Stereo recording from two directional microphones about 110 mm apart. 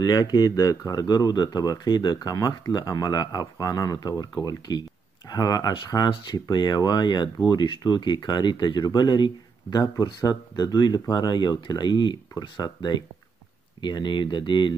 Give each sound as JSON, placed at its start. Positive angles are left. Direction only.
{"t": 0.0, "sound": "speech", "side_deg": 35}